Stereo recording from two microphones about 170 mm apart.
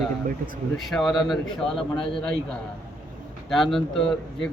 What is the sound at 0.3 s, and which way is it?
Speech, 55° right (ahead or behind).